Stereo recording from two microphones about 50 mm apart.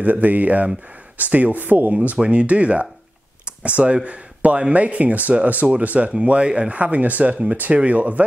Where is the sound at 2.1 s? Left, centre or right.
Right.